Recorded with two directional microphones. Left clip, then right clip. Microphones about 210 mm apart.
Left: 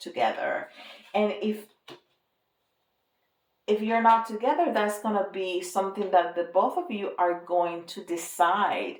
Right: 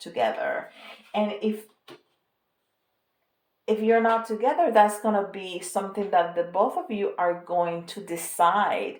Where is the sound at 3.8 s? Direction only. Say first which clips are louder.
Even; 30° right (ahead or behind).